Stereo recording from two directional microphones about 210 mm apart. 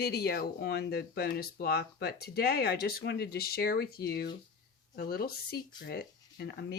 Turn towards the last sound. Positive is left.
turn(degrees=45)  # may be behind; listen again after turning